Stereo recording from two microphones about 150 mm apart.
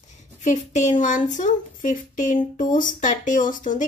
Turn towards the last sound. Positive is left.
turn(degrees=60)  # may be behind; listen again after turning